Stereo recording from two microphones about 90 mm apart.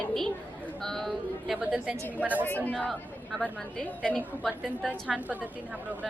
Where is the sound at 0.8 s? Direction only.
5° left (ahead or behind).